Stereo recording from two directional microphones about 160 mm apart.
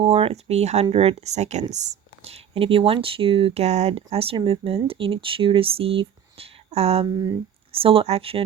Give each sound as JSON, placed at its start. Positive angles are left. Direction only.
{"t": 0.0, "sound": "speech", "side_deg": -40}